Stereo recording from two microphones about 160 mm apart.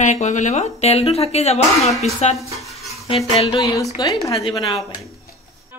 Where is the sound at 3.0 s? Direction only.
40° left (ahead or behind).